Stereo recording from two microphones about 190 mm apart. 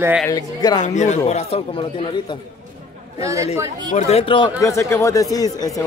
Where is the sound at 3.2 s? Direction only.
15° right (ahead or behind).